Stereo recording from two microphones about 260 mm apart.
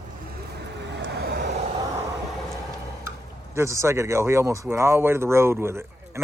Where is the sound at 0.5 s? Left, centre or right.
Right.